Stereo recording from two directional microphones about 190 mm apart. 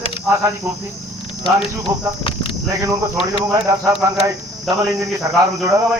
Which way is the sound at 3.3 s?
15° right (ahead or behind).